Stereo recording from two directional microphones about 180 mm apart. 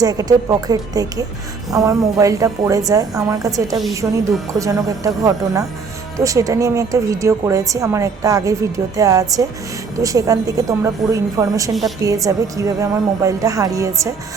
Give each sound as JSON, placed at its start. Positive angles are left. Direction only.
{"t": 0.0, "sound": "a woman's voice", "side_deg": -20}
{"t": 4.0, "sound": "speech", "side_deg": -5}
{"t": 4.6, "sound": "a woman's voice", "side_deg": -20}